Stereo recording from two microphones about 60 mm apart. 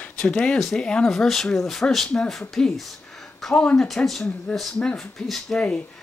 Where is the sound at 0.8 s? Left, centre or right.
Centre.